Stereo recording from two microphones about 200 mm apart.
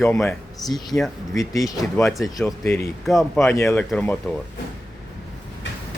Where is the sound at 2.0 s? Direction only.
Centre (ahead or behind).